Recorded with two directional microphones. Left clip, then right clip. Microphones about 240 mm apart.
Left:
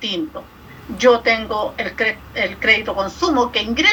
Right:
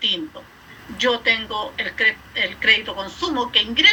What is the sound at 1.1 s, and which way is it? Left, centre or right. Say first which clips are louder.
Speech: left 6 dB; centre.